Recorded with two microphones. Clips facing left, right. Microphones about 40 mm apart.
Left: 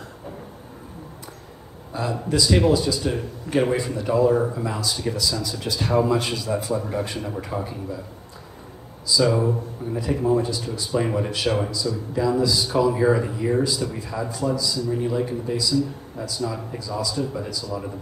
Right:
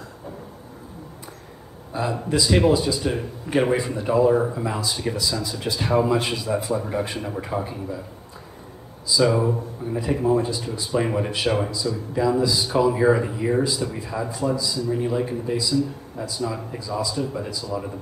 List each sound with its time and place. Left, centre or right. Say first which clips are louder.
1.9 s speech: right 1 dB; centre
9.0 s speech: even; centre